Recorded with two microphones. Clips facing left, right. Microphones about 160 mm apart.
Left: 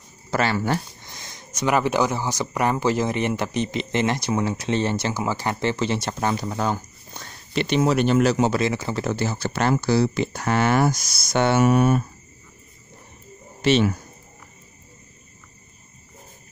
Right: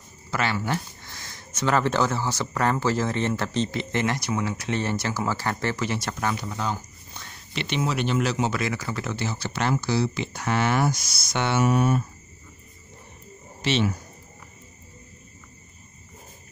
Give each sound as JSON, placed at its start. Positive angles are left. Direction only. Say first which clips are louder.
{"t": 0.3, "sound": "speech", "louder": "left 4 dB", "side_deg": 40}
{"t": 1.0, "sound": "speech", "louder": "left 1 dB", "side_deg": 20}
{"t": 6.5, "sound": "speech", "louder": "left 5 dB", "side_deg": 45}
{"t": 8.5, "sound": "speech", "louder": "left 5 dB", "side_deg": 25}
{"t": 9.0, "sound": "speech", "louder": "left 5 dB", "side_deg": 45}
{"t": 13.6, "sound": "speech", "louder": "left 5 dB", "side_deg": 50}